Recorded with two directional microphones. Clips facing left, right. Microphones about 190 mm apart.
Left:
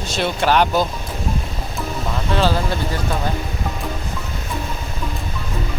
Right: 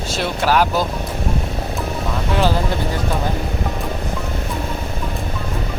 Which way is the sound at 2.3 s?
15° right (ahead or behind).